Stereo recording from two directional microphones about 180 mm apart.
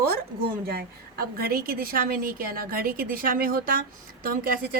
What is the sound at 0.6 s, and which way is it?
A woman's voice, 55° right (ahead or behind).